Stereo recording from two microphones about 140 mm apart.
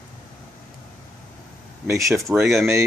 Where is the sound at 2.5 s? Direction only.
Centre (ahead or behind).